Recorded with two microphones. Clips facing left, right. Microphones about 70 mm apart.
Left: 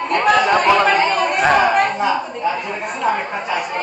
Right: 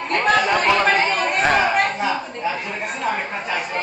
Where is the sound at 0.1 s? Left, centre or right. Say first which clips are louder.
Left 3 dB; centre.